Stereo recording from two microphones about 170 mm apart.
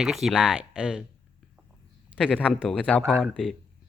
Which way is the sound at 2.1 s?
5° left (ahead or behind).